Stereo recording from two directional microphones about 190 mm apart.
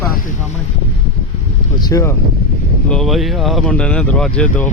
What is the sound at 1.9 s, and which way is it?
Speech, 15° left (ahead or behind).